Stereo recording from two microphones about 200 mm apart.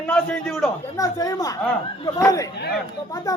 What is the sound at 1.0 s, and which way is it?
Speech, 20° left (ahead or behind).